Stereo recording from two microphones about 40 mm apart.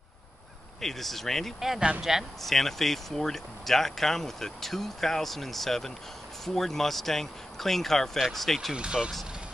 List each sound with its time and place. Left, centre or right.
0.7 s speech: centre
1.8 s speech: right
2.4 s speech: centre
8.7 s speech: right